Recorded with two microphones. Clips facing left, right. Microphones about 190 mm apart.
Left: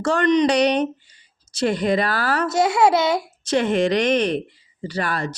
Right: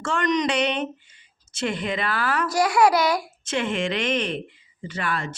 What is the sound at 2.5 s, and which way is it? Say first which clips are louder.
Speech: left 2 dB; 25° left (ahead or behind).